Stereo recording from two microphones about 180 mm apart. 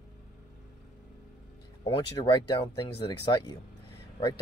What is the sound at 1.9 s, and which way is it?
Speech, 30° left (ahead or behind).